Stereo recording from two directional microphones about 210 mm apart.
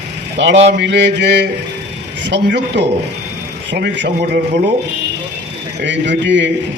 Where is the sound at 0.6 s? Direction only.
55° right (ahead or behind).